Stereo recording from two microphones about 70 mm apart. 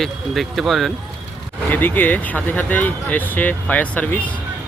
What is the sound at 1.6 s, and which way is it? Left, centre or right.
Speech, left.